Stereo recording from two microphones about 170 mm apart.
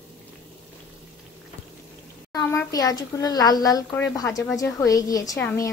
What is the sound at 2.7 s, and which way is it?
A woman's voice, 20° left (ahead or behind).